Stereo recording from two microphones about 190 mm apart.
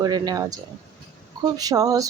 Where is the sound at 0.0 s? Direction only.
20° right (ahead or behind).